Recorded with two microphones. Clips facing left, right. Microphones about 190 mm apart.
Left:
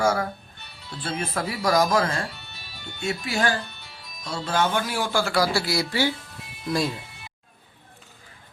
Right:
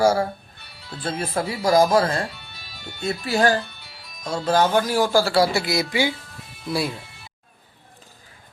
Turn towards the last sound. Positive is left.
turn(degrees=-10)  # may be behind; listen again after turning